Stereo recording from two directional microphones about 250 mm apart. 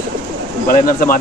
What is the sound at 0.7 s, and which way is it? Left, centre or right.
Speech, left.